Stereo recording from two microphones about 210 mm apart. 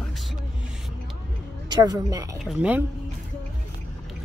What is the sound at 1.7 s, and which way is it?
Speech, 20° right (ahead or behind).